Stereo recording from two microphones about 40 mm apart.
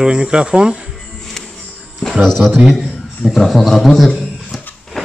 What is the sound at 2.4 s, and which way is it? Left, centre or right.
Speech, centre.